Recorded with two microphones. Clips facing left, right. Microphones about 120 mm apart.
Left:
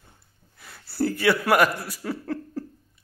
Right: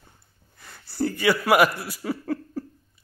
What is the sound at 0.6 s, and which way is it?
Speech, centre (ahead or behind).